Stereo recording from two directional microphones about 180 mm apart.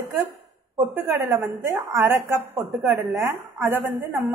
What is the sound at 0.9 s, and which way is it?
A woman's voice, 10° right (ahead or behind).